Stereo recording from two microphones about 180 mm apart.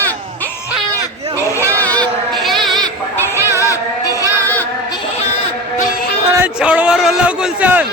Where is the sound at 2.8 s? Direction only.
15° right (ahead or behind).